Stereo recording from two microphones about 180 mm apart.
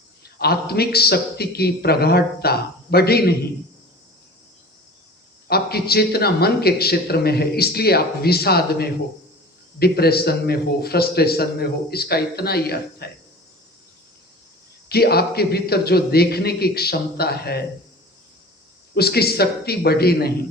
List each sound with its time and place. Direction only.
0.2 s a man's voice: 60° left (ahead or behind)
5.5 s a man's voice: 60° left (ahead or behind)
14.8 s a man's voice: 60° left (ahead or behind)
18.9 s a man's voice: 60° left (ahead or behind)